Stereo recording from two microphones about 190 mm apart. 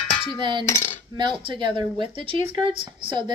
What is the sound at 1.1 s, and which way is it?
Speech, 25° right (ahead or behind).